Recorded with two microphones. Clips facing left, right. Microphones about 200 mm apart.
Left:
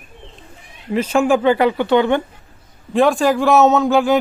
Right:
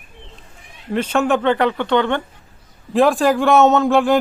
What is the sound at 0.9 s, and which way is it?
Speech, 5° left (ahead or behind).